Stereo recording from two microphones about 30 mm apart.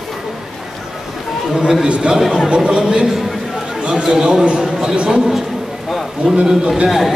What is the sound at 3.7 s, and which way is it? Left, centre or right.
Chatter, right.